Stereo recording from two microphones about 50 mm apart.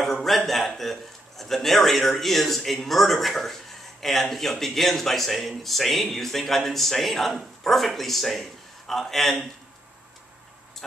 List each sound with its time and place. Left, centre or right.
0.0 s a man's voice: centre